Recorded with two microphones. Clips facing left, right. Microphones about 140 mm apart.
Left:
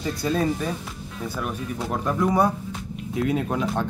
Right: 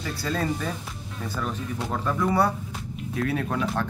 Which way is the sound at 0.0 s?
15° left (ahead or behind).